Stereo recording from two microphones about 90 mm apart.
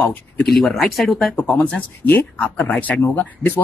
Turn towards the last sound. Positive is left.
turn(degrees=20)  # may be behind; listen again after turning